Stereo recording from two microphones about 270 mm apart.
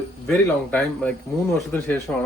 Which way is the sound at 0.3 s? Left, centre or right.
Centre.